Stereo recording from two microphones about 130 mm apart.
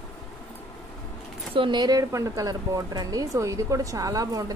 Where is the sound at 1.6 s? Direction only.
35° right (ahead or behind).